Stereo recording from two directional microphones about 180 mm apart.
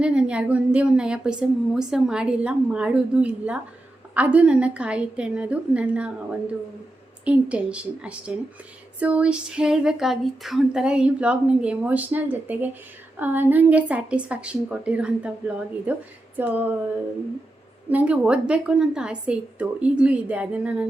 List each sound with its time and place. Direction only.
0.0 s a woman's voice: 5° right (ahead or behind)
7.3 s speech: 5° right (ahead or behind)
17.8 s speech: 5° right (ahead or behind)